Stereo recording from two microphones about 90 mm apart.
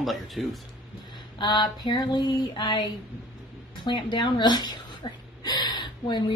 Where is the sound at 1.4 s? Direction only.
60° left (ahead or behind).